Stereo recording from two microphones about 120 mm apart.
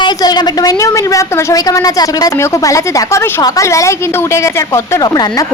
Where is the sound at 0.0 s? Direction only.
35° left (ahead or behind).